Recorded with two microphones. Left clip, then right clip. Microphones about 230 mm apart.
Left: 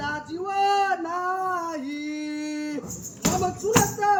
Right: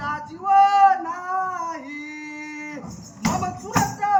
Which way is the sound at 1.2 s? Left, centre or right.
Left.